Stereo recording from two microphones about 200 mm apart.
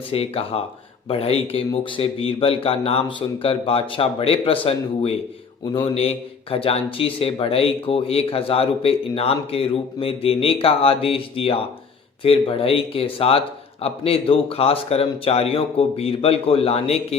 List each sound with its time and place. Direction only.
0.1 s a man's voice: 30° left (ahead or behind)